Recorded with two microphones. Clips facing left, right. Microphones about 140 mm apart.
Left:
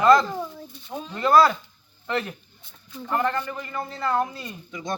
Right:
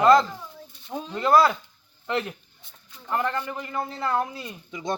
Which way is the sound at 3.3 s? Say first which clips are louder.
Even; 20° right (ahead or behind).